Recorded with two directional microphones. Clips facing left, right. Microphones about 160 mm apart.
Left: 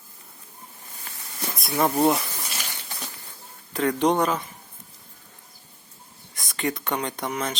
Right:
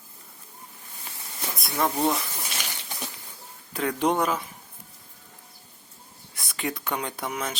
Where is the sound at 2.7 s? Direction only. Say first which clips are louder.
Right 1 dB; 15° right (ahead or behind).